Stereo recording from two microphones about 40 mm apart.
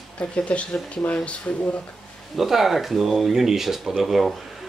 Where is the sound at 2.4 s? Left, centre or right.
Centre.